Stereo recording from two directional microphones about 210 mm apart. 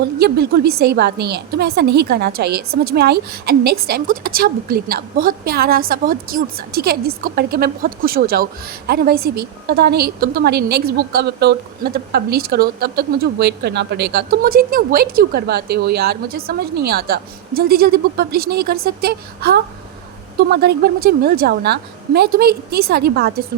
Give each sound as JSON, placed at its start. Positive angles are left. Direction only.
{"t": 0.2, "sound": "a woman's voice", "side_deg": -50}